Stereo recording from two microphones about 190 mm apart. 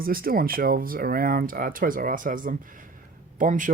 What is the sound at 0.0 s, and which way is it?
Speech, 50° right (ahead or behind).